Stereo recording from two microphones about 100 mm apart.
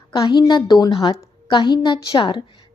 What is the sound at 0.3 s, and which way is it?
A woman's voice, 50° left (ahead or behind).